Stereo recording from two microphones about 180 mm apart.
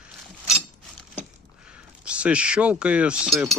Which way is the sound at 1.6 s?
5° right (ahead or behind).